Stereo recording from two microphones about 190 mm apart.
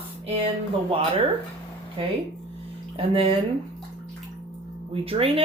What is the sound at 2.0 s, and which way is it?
Speech, 30° right (ahead or behind).